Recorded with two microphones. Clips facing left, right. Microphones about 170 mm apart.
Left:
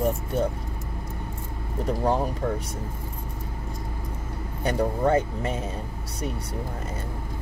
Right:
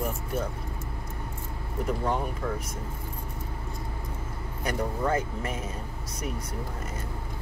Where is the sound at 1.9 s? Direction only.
35° left (ahead or behind).